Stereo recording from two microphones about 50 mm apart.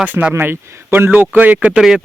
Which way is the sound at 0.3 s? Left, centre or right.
Right.